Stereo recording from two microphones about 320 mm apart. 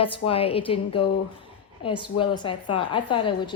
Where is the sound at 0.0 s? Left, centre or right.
Centre.